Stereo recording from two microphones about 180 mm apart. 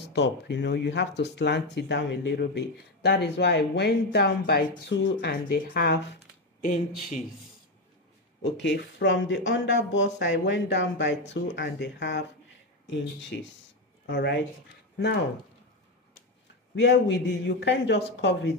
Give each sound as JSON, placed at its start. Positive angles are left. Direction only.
{"t": 0.0, "sound": "speech", "side_deg": 70}
{"t": 6.6, "sound": "speech", "side_deg": 45}
{"t": 8.4, "sound": "speech", "side_deg": 70}
{"t": 13.3, "sound": "speech", "side_deg": 80}
{"t": 16.8, "sound": "speech", "side_deg": 75}